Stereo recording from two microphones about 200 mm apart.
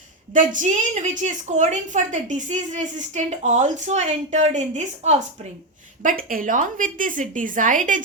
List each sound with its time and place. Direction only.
0.3 s a woman's voice: 40° right (ahead or behind)